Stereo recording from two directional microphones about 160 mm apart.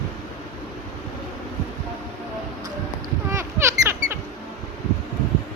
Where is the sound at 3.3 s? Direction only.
15° right (ahead or behind).